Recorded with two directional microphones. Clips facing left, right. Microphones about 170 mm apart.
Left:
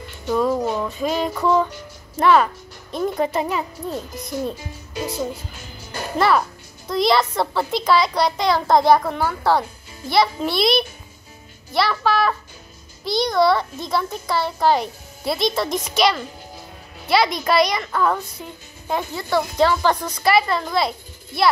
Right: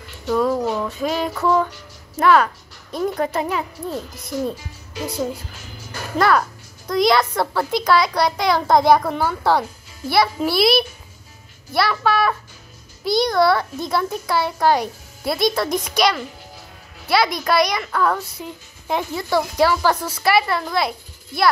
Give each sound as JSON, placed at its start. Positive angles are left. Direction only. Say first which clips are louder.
{"t": 0.5, "sound": "speech", "louder": "even", "side_deg": 10}
{"t": 0.9, "sound": "speech", "louder": "even", "side_deg": -5}
{"t": 1.4, "sound": "speech", "louder": "even", "side_deg": 10}
{"t": 5.9, "sound": "music", "louder": "left 3 dB", "side_deg": 25}
{"t": 6.1, "sound": "speech", "louder": "right 1 dB", "side_deg": 5}
{"t": 18.4, "sound": "speech", "louder": "right 3 dB", "side_deg": -10}